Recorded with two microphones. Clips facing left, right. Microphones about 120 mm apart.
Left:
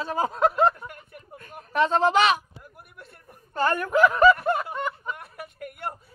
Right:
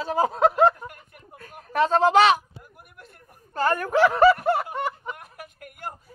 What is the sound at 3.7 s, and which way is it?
Speech, 35° right (ahead or behind).